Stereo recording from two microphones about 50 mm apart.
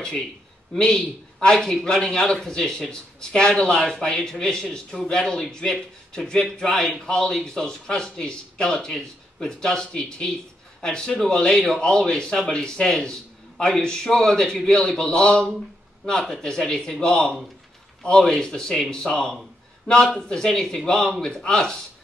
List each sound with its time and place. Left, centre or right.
0.7 s a man's voice: centre